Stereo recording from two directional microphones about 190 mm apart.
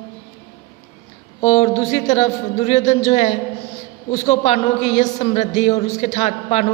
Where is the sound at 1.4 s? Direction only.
35° left (ahead or behind).